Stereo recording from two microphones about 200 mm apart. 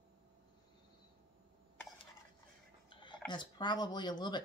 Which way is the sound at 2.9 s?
25° left (ahead or behind).